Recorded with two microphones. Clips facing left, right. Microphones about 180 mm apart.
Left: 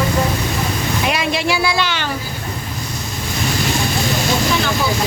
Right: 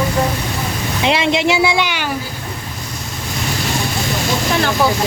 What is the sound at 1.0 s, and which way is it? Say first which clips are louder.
Speech: right 6 dB; 25° right (ahead or behind).